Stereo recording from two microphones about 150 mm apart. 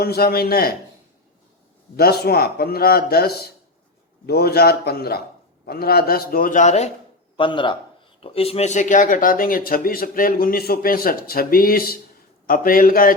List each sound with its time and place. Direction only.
0.0 s speech: 90° left
2.0 s a man's voice: 90° left; by 6.9 s 50° left (ahead or behind)
7.3 s a man's voice: 35° left (ahead or behind); by 13.1 s 70° left (ahead or behind)